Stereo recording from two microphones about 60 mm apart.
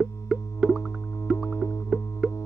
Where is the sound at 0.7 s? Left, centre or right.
Left.